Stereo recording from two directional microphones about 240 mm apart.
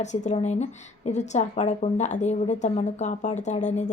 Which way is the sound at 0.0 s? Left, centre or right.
Left.